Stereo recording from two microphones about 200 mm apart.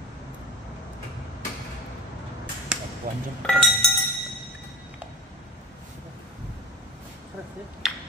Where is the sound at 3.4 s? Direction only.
Centre (ahead or behind).